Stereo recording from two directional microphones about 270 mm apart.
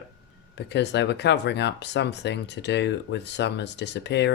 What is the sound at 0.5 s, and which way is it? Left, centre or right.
Speech, left.